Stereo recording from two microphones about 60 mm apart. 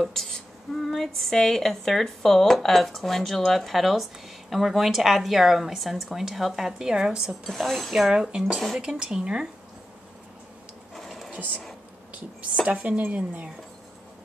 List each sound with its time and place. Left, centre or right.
0.0 s speech: centre
7.4 s speech: centre
11.0 s a sound: centre
12.6 s speech: right